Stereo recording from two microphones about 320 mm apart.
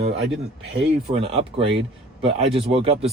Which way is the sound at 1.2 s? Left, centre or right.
Centre.